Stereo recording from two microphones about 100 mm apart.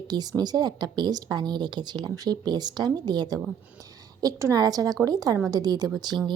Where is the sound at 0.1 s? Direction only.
45° right (ahead or behind).